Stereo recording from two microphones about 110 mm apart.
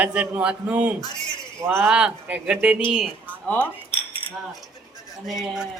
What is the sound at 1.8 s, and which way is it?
Speech, 10° right (ahead or behind).